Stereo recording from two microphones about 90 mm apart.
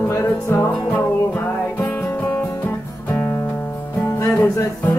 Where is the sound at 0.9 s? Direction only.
20° left (ahead or behind).